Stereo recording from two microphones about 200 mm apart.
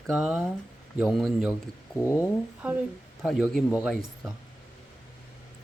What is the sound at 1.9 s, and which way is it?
Speech, 15° left (ahead or behind).